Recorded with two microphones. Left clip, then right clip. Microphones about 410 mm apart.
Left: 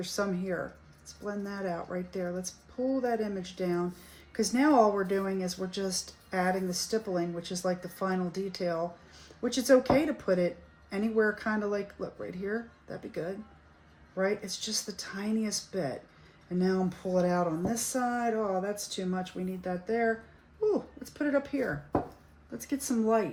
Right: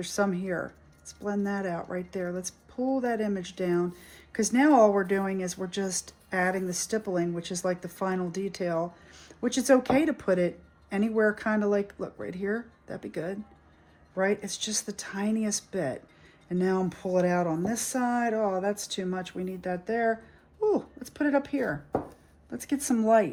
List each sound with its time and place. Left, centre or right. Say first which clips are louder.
0.0 s speech: right 4 dB; right